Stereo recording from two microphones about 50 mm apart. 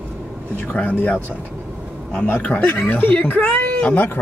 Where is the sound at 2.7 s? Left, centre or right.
Left.